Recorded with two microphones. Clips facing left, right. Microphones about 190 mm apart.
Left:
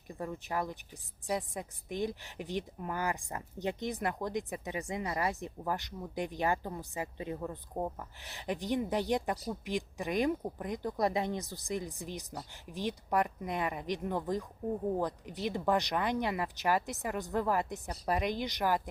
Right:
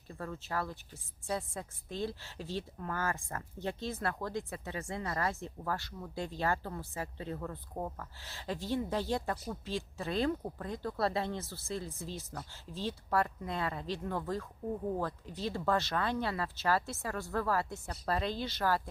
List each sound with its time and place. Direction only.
0.1 s a woman's voice: 15° left (ahead or behind)